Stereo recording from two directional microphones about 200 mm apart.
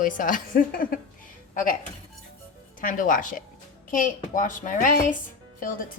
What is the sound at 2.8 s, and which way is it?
A woman's voice, 45° left (ahead or behind).